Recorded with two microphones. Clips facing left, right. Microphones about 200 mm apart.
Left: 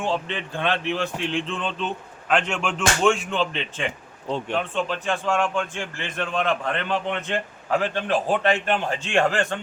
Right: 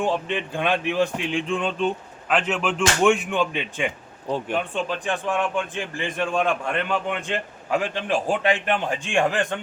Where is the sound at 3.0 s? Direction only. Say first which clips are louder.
Right 2 dB; 15° right (ahead or behind).